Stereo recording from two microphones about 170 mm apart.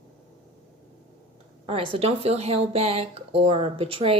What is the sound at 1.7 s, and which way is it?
Speech, 35° right (ahead or behind).